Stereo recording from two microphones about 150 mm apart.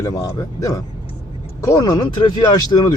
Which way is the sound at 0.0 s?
25° left (ahead or behind).